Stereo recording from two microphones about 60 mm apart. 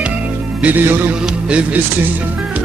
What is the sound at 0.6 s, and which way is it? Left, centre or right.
Speech, right.